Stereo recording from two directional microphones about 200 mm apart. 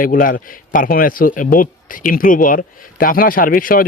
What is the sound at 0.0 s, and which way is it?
Speech, 45° left (ahead or behind).